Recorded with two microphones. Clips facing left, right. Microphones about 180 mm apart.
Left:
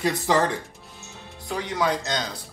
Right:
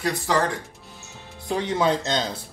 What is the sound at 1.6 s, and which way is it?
Speech, 25° right (ahead or behind).